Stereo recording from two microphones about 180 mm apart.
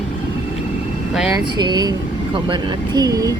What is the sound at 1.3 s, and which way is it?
Speech, 25° right (ahead or behind).